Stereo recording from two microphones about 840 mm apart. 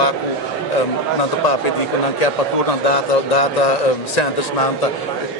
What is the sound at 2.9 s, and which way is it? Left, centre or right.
Speech, left.